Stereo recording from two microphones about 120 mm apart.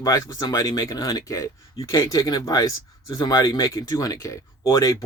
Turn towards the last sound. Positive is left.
turn(degrees=30)  # may be behind; listen again after turning